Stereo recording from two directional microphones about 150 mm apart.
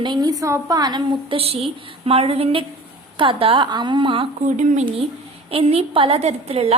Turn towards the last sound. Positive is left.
turn(degrees=-40)  # may be behind; listen again after turning